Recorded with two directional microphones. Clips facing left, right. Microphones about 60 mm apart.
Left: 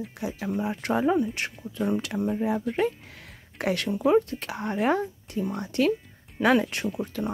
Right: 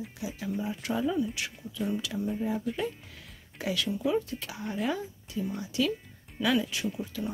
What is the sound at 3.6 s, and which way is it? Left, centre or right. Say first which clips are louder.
Speech: left 5 dB; left.